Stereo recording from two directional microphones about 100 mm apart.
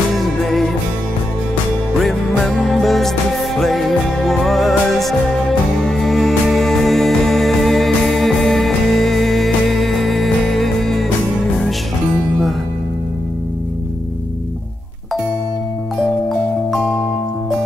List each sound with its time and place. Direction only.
0.1 s music: centre (ahead or behind)
2.0 s music: centre (ahead or behind)